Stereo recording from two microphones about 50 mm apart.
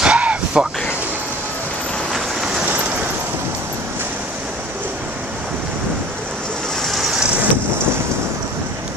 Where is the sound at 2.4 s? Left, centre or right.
Centre.